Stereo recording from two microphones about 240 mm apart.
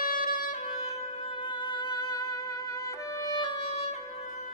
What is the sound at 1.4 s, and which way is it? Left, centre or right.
Music, centre.